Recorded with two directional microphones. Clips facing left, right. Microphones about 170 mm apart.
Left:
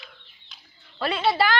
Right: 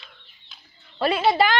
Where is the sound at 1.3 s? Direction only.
20° right (ahead or behind).